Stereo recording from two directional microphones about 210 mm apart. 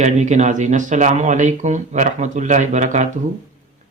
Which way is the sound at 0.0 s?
35° right (ahead or behind).